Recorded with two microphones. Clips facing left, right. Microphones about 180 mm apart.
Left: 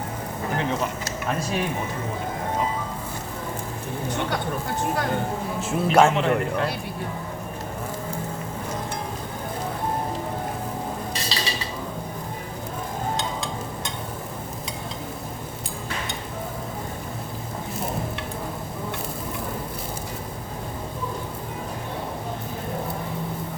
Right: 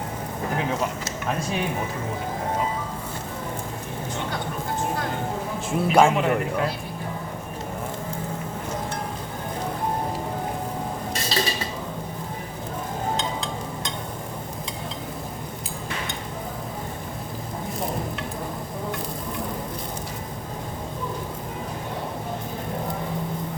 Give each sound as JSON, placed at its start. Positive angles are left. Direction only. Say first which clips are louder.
{"t": 1.4, "sound": "a man's voice", "louder": "left 1 dB", "side_deg": 0}
{"t": 5.6, "sound": "a man's voice", "louder": "even", "side_deg": 5}
{"t": 11.3, "sound": "dishes", "louder": "right 8 dB", "side_deg": -50}